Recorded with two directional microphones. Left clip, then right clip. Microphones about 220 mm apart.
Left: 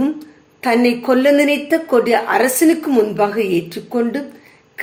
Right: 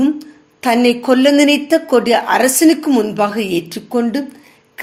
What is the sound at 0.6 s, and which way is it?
A woman's voice, 40° right (ahead or behind).